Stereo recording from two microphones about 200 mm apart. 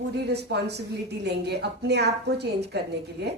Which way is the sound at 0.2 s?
55° right (ahead or behind).